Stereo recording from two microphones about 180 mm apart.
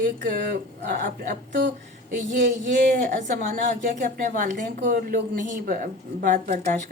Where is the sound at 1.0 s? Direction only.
50° right (ahead or behind).